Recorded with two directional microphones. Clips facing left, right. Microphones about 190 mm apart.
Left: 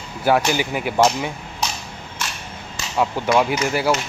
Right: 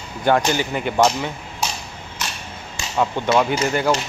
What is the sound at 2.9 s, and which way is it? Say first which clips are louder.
Speech: even; 5° left (ahead or behind).